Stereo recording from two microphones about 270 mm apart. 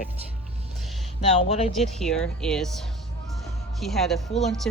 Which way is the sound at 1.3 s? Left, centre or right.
Left.